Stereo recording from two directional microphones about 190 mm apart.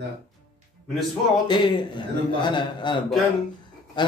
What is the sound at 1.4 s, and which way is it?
A man's voice, 25° left (ahead or behind).